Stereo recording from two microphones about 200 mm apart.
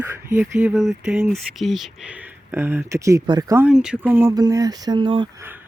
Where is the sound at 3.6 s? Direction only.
5° right (ahead or behind); by 5.3 s 25° right (ahead or behind).